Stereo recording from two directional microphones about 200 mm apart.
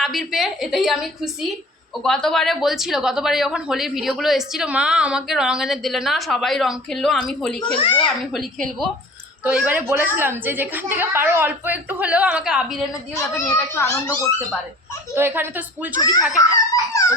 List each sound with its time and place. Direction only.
0.0 s speech: centre (ahead or behind)
7.8 s a child's voice: 25° left (ahead or behind)
8.3 s a woman's voice: centre (ahead or behind)
13.3 s a child's voice: 10° left (ahead or behind)
15.1 s a woman's voice: 10° right (ahead or behind)
16.0 s a child's voice: 20° left (ahead or behind)